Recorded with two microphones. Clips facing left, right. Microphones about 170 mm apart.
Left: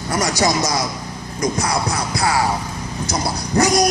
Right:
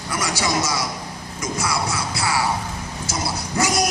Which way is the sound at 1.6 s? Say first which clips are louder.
Left 3 dB; 40° left (ahead or behind).